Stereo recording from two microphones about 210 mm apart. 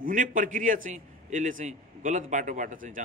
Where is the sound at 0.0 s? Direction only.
40° right (ahead or behind).